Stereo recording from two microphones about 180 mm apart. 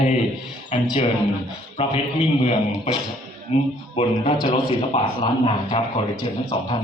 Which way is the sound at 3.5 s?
35° left (ahead or behind).